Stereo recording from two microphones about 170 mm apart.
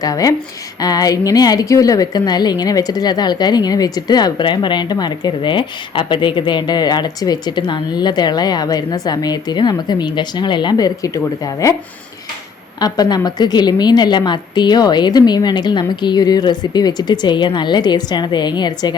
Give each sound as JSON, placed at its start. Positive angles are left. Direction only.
{"t": 0.0, "sound": "a woman's voice", "side_deg": 20}
{"t": 12.8, "sound": "a woman's voice", "side_deg": 25}